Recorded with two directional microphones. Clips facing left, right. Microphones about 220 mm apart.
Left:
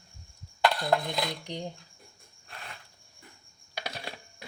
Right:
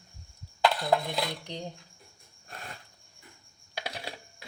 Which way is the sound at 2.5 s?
45° right (ahead or behind).